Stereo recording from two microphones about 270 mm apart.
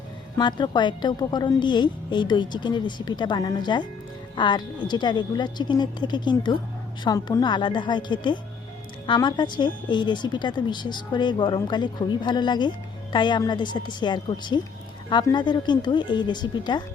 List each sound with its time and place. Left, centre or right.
0.3 s speech: centre